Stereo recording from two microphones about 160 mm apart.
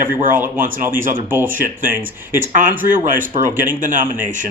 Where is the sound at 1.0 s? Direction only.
55° right (ahead or behind).